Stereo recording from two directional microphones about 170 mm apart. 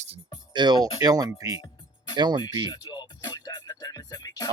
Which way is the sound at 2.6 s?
25° left (ahead or behind).